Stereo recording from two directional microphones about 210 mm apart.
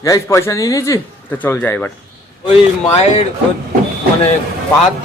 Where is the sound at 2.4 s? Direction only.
30° left (ahead or behind).